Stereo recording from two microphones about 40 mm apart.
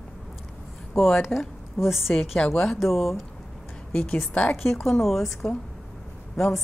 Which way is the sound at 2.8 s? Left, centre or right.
Centre.